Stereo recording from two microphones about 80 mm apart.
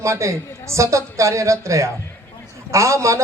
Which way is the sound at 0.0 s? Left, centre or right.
Right.